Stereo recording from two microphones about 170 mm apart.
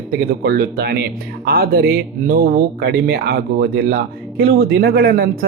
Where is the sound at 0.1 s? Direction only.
65° right (ahead or behind).